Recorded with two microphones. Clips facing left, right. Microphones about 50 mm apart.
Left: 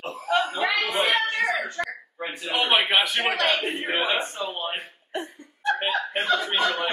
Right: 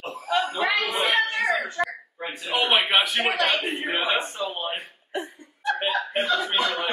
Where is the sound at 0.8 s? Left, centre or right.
Centre.